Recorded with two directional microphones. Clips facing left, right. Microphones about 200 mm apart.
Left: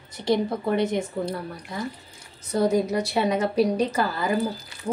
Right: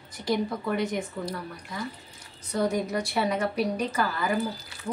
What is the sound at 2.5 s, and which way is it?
Speech, 25° left (ahead or behind).